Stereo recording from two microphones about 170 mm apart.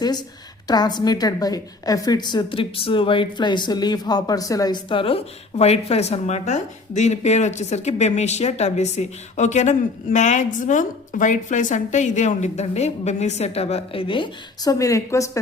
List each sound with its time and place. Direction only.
0.0 s a woman's voice: 25° left (ahead or behind)